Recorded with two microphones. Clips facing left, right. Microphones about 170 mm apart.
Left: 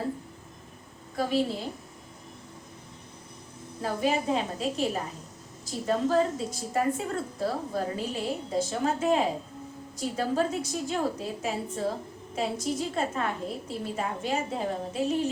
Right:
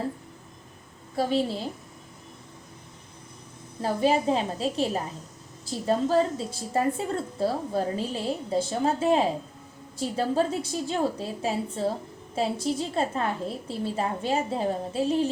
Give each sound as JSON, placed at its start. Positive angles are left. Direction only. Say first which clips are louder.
{"t": 1.1, "sound": "a woman's voice", "louder": "right 2 dB", "side_deg": -30}
{"t": 3.8, "sound": "a woman's voice", "louder": "right 4 dB", "side_deg": -30}